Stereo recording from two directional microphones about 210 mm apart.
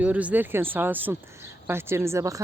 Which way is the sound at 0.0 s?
5° right (ahead or behind).